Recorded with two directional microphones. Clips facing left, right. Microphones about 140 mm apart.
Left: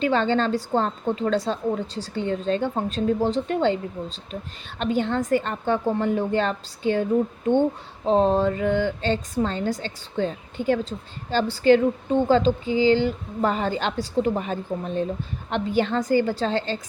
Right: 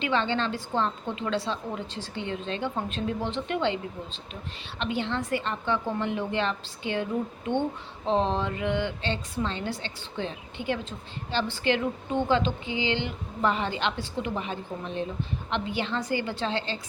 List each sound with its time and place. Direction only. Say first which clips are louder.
0.0 s a woman's voice: left 6 dB; 40° left (ahead or behind)